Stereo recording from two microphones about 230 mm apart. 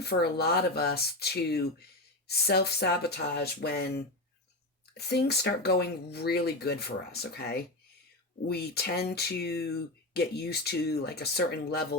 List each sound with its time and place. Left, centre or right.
0.0 s speech: left